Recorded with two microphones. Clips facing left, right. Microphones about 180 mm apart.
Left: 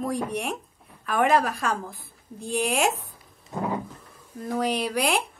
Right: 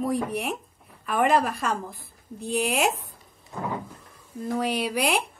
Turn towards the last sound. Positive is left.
turn(degrees=-5)  # may be behind; listen again after turning